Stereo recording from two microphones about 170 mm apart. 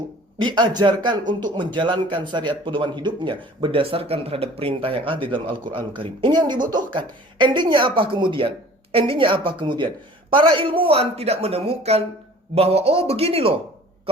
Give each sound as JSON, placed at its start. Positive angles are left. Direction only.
{"t": 0.3, "sound": "speech", "side_deg": -30}